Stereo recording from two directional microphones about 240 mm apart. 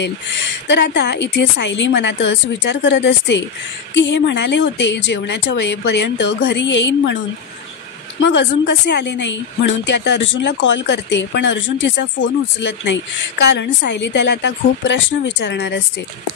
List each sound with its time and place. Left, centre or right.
0.0 s speech: left
8.2 s speech: left